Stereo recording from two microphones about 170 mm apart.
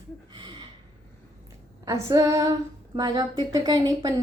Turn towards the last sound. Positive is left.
turn(degrees=-20)  # may be behind; listen again after turning